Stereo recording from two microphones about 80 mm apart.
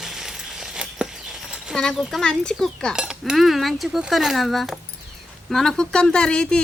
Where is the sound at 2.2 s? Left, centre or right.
Centre.